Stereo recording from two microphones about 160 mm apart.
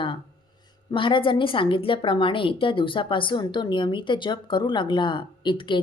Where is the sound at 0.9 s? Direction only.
30° left (ahead or behind).